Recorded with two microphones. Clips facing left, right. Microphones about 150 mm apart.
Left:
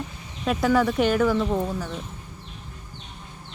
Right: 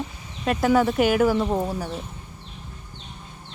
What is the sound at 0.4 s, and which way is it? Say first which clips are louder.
Speech: right 1 dB; centre (ahead or behind).